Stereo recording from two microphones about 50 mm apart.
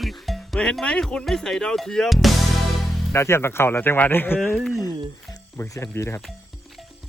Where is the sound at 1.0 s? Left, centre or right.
Centre.